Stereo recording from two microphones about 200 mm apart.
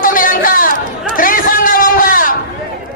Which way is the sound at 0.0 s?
45° left (ahead or behind).